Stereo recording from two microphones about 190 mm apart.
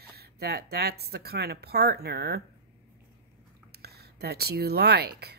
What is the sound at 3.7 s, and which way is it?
Speech, 55° right (ahead or behind).